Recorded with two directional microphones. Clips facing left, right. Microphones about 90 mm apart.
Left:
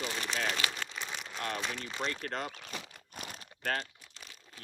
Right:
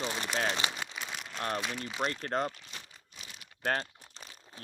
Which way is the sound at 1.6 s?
5° right (ahead or behind).